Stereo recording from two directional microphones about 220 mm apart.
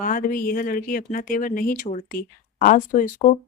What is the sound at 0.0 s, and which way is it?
Speech, 40° left (ahead or behind).